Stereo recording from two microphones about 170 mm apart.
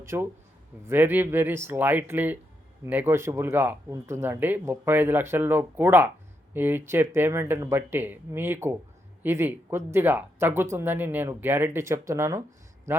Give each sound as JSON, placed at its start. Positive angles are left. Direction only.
{"t": 0.0, "sound": "a man's voice", "side_deg": -15}